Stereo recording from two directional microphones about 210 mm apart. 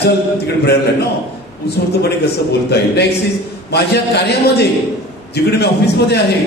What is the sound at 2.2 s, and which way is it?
A man's voice, 50° left (ahead or behind).